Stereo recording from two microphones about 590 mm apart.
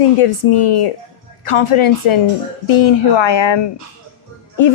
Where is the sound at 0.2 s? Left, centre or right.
Left.